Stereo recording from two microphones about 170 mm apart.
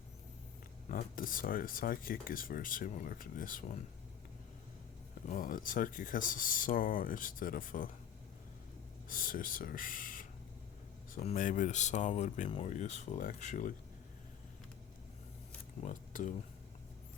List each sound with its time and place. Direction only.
0.9 s speech: 50° left (ahead or behind)
5.3 s speech: 50° left (ahead or behind)
9.0 s speech: 55° left (ahead or behind)
15.8 s speech: 50° left (ahead or behind)